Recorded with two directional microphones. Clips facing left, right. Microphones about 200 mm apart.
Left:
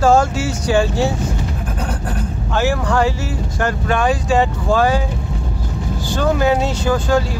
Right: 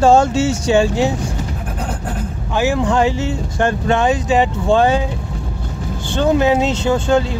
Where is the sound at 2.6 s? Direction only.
20° right (ahead or behind).